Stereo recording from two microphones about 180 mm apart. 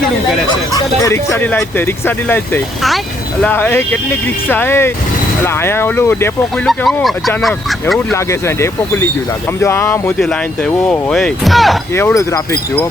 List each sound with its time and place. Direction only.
0.7 s speech: 20° left (ahead or behind)
6.7 s speech: centre (ahead or behind)
7.9 s speech: 15° left (ahead or behind)
11.9 s speech: 15° left (ahead or behind)